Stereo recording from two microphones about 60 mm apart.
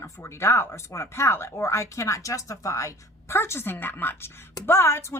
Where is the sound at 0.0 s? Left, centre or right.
Left.